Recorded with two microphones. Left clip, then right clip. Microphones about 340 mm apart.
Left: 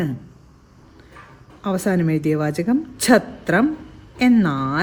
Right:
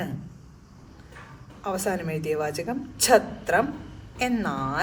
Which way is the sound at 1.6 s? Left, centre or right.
Left.